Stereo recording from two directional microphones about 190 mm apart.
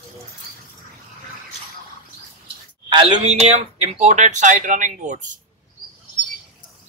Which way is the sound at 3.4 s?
35° right (ahead or behind).